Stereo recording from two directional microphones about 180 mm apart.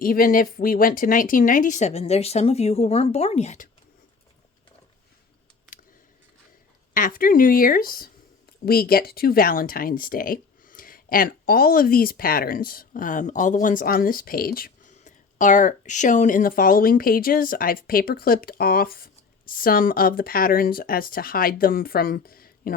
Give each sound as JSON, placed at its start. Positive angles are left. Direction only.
{"t": 0.0, "sound": "speech", "side_deg": 50}
{"t": 6.9, "sound": "speech", "side_deg": 50}
{"t": 14.9, "sound": "speech", "side_deg": 45}